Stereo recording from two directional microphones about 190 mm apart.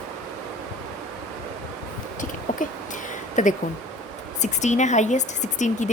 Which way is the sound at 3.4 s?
40° left (ahead or behind).